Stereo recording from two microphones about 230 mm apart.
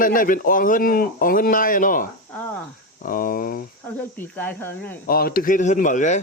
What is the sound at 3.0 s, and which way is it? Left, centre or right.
Speech, left.